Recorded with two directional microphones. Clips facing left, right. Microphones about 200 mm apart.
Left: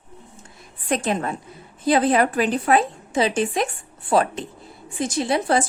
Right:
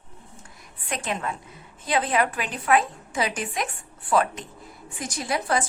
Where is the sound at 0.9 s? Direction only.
35° left (ahead or behind).